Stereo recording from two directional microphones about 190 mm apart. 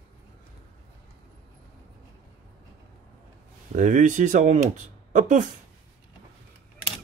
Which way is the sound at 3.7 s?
40° right (ahead or behind).